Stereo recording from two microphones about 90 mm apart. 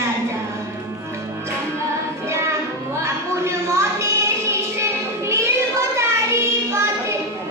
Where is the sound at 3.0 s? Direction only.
30° right (ahead or behind).